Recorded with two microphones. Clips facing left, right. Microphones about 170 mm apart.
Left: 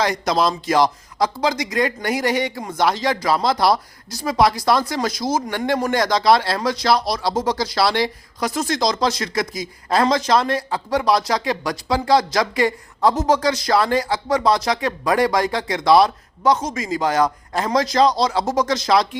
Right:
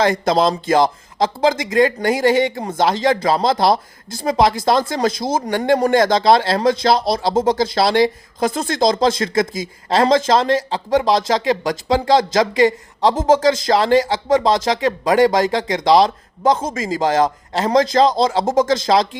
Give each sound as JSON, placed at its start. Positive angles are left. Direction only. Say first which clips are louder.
{"t": 0.0, "sound": "speech", "louder": "right 4 dB", "side_deg": -25}
{"t": 5.5, "sound": "speech", "louder": "right 5 dB", "side_deg": -40}
{"t": 5.9, "sound": "speech", "louder": "right 1 dB", "side_deg": -25}